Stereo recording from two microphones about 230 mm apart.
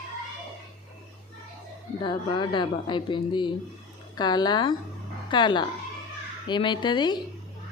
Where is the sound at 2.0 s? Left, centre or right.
Left.